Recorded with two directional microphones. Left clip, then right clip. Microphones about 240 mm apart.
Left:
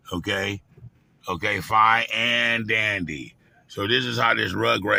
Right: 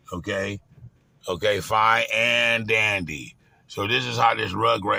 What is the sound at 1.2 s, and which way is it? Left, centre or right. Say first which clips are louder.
Speech: right 2 dB; centre.